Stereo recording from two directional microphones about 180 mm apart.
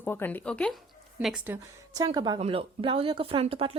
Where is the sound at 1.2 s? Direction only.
5° right (ahead or behind).